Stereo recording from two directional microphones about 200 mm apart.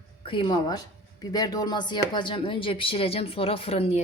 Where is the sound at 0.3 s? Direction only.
25° left (ahead or behind).